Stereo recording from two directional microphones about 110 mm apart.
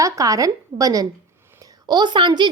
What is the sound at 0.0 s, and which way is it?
A woman's voice, 30° right (ahead or behind).